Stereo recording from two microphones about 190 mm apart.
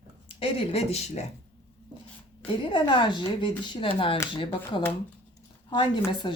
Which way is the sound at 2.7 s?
25° left (ahead or behind).